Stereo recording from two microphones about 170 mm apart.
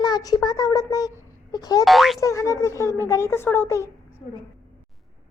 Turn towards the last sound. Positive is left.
turn(degrees=15)  # may be behind; listen again after turning